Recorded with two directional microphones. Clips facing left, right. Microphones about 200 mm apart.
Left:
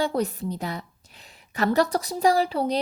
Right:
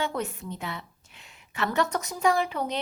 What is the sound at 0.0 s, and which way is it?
A woman's voice, 35° left (ahead or behind).